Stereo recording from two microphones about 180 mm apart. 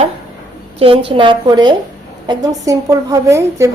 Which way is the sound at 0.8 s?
30° right (ahead or behind).